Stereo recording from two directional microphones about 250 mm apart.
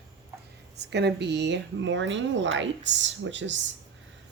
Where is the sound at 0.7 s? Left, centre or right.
Right.